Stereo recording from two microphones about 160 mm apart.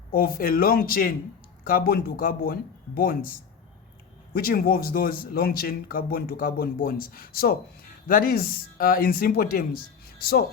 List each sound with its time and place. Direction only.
0.1 s speech: 65° left (ahead or behind)